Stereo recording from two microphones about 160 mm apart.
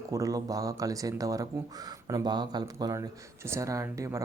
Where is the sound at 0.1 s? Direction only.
20° right (ahead or behind).